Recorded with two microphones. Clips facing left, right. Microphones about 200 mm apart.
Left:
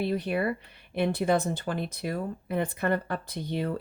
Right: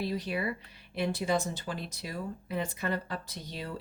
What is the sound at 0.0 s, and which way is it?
Speech, 55° left (ahead or behind).